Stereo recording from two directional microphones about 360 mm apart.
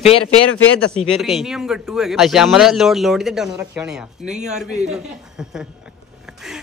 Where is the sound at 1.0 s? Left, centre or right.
Centre.